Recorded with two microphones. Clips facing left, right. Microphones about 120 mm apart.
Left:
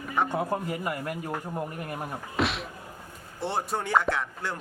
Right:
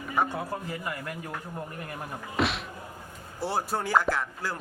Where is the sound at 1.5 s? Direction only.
5° left (ahead or behind).